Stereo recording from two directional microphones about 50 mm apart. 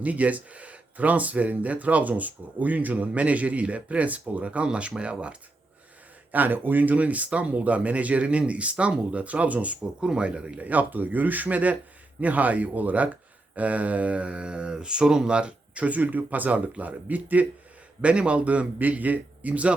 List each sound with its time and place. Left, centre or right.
0.0 s speech: right
6.3 s speech: right
10.6 s speech: right